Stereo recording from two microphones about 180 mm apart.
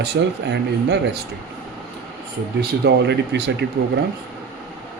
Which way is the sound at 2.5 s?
65° right (ahead or behind).